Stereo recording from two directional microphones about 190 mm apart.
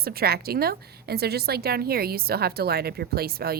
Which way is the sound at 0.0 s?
50° right (ahead or behind).